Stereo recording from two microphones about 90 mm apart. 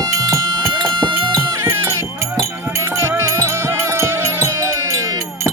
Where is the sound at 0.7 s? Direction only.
55° right (ahead or behind).